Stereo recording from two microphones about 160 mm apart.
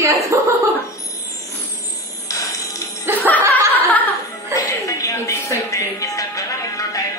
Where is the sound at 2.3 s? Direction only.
20° left (ahead or behind).